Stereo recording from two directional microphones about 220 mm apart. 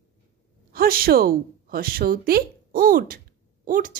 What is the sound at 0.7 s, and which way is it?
A woman's voice, 40° right (ahead or behind).